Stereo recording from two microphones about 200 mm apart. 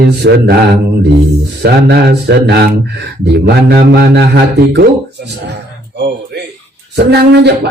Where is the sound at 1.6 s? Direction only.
55° right (ahead or behind).